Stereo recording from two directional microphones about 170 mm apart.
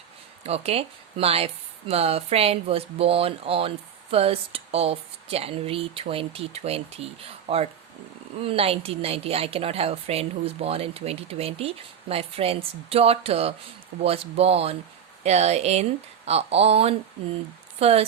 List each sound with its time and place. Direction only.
0.4 s a woman's voice: 35° right (ahead or behind)